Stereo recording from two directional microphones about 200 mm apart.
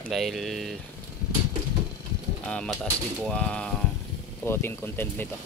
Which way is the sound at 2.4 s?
5° left (ahead or behind).